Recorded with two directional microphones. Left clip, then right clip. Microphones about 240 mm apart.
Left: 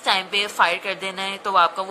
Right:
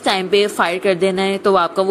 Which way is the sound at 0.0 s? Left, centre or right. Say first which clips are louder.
Right 5 dB; centre.